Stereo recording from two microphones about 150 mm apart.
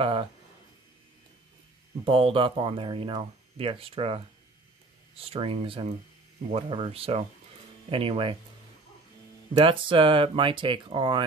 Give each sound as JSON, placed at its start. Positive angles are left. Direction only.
{"t": 0.0, "sound": "speech", "side_deg": -35}
{"t": 2.0, "sound": "speech", "side_deg": -35}
{"t": 9.5, "sound": "speech", "side_deg": -35}